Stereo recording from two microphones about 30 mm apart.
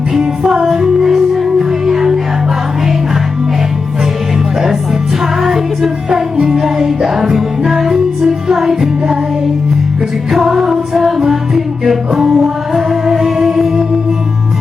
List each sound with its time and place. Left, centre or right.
0.2 s music: right
5.4 s music: centre
10.3 s music: centre